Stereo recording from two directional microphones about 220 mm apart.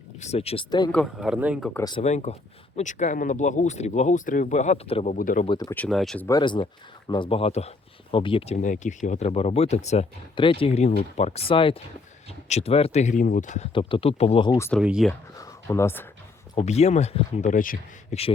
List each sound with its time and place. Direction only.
0.2 s speech: 30° left (ahead or behind)
0.9 s speech: 5° right (ahead or behind)
1.7 s speech: 15° left (ahead or behind)
2.0 s speech: 30° left (ahead or behind)
5.5 s speech: 15° left (ahead or behind)
5.8 s speech: centre (ahead or behind)
6.2 s speech: 20° left (ahead or behind); by 13.7 s 35° left (ahead or behind)
13.7 s speech: 25° left (ahead or behind)
14.7 s speech: 5° right (ahead or behind)
15.4 s speech: 15° left (ahead or behind)
16.6 s speech: 30° left (ahead or behind)